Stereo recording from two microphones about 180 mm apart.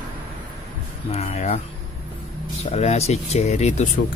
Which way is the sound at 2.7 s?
35° left (ahead or behind).